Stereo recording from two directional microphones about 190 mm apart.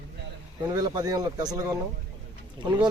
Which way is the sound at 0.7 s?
20° right (ahead or behind).